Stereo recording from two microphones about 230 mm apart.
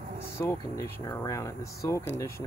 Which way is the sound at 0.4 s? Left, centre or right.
Centre.